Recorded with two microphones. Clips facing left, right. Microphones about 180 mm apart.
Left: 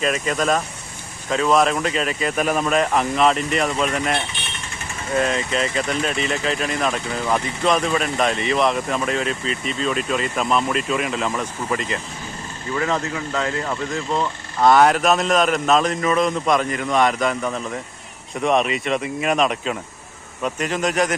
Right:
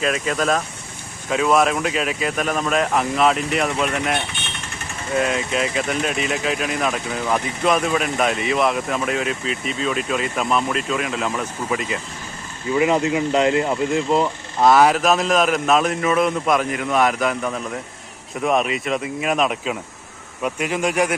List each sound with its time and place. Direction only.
0.0 s speech: centre (ahead or behind)